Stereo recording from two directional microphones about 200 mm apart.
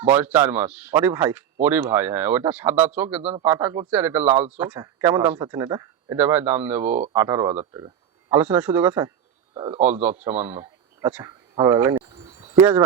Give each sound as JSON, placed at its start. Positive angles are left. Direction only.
{"t": 0.0, "sound": "speech", "side_deg": -10}
{"t": 9.6, "sound": "speech", "side_deg": -25}
{"t": 10.0, "sound": "a man's voice", "side_deg": -10}